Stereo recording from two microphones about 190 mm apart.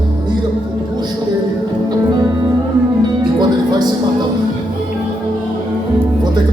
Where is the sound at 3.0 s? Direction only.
20° right (ahead or behind).